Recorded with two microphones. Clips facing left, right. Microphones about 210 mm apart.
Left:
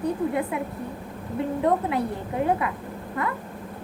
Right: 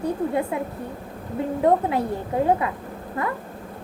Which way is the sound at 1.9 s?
25° right (ahead or behind).